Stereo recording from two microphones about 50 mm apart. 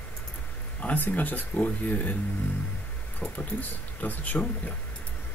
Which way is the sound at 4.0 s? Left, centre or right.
Left.